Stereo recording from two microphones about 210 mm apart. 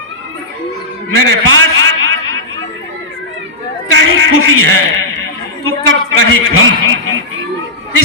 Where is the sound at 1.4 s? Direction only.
70° right (ahead or behind).